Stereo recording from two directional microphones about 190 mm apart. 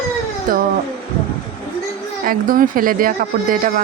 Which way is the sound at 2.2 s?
45° right (ahead or behind).